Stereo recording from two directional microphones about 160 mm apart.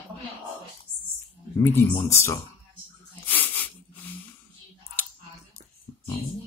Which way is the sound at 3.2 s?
10° left (ahead or behind).